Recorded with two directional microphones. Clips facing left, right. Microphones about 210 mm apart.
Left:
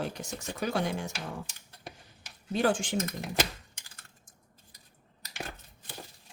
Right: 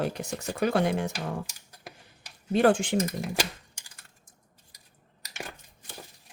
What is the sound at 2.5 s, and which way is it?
Speech, 60° right (ahead or behind).